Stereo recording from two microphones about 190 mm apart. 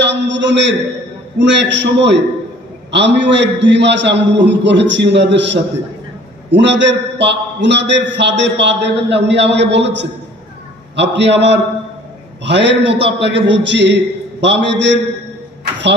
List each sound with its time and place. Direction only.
0.0 s a man's voice: 70° right (ahead or behind)